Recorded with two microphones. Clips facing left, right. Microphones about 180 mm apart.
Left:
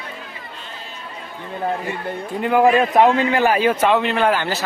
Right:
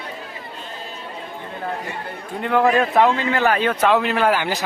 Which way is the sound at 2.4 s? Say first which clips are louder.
Left 2 dB; 10° left (ahead or behind).